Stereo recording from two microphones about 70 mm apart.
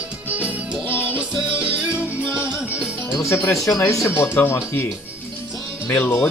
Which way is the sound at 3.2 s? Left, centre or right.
Left.